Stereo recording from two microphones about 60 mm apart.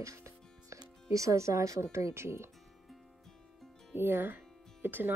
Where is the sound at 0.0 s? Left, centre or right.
Right.